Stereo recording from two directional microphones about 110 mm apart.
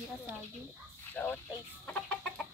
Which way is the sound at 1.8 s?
10° left (ahead or behind).